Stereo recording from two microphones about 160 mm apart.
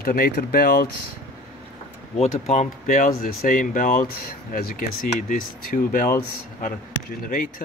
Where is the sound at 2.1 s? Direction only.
40° left (ahead or behind).